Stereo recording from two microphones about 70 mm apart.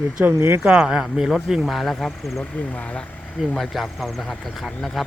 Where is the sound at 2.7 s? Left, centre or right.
Centre.